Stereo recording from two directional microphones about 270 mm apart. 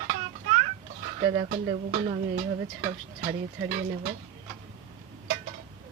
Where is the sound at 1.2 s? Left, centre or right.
Centre.